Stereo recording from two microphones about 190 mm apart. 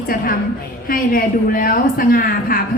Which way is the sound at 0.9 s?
50° left (ahead or behind).